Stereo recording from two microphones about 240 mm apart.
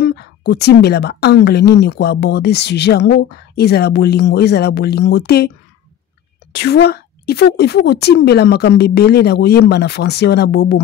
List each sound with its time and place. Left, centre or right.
0.0 s a woman's voice: left
6.5 s a woman's voice: left